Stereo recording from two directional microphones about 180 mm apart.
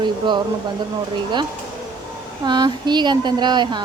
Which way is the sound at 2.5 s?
25° right (ahead or behind).